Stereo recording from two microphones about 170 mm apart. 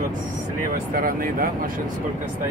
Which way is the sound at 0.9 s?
55° right (ahead or behind).